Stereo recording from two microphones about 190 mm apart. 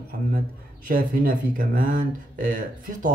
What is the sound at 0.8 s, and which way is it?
Speech, 50° right (ahead or behind).